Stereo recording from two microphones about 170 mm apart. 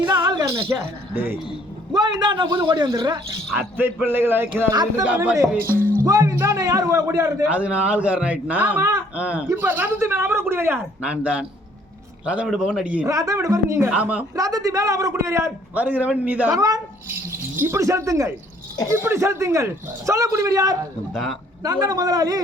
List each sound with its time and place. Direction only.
0.0 s speech: 25° right (ahead or behind)
1.9 s a man's voice: 25° right (ahead or behind)
3.6 s a man's voice: 15° right (ahead or behind)
5.0 s a man's voice: 10° right (ahead or behind)
7.5 s a man's voice: 10° right (ahead or behind)
13.1 s a man's voice: 20° right (ahead or behind)
14.3 s a man's voice: 20° right (ahead or behind)
16.5 s a man's voice: 20° right (ahead or behind)
21.1 s a man's voice: centre (ahead or behind)
21.6 s a man's voice: 20° right (ahead or behind)